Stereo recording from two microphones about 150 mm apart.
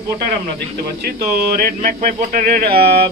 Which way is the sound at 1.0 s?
85° right.